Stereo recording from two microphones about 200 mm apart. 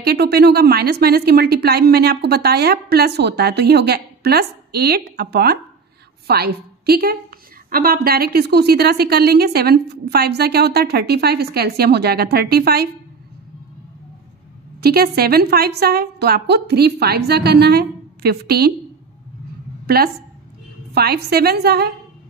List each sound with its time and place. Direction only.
0.0 s a woman's voice: 55° right (ahead or behind)
14.8 s a woman's voice: 50° right (ahead or behind)
20.9 s a woman's voice: 55° right (ahead or behind)